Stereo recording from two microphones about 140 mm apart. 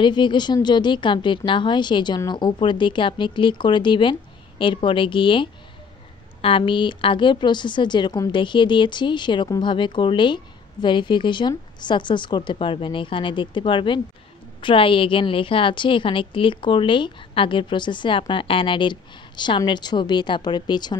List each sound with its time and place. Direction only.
0.0 s speech: 35° left (ahead or behind)